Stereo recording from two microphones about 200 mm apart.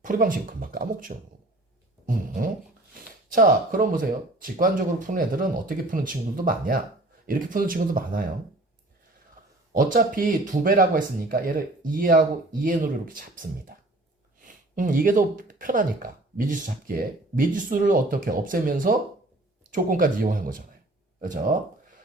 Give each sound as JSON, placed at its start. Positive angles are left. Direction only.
{"t": 0.0, "sound": "speech", "side_deg": -40}
{"t": 2.0, "sound": "a sound", "side_deg": -45}
{"t": 2.9, "sound": "speech", "side_deg": -45}
{"t": 9.7, "sound": "speech", "side_deg": -45}